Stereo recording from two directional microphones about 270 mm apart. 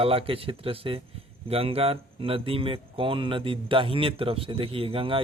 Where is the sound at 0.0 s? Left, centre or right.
Right.